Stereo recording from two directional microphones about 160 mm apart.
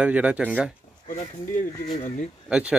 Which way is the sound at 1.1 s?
55° left (ahead or behind).